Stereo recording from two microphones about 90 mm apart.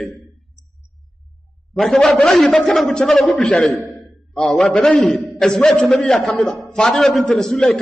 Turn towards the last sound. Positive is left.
turn(degrees=5)  # may be behind; listen again after turning